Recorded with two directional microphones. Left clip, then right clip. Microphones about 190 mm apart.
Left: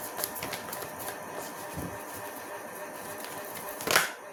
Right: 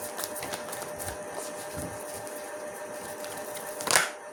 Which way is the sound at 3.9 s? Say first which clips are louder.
Even; 15° right (ahead or behind).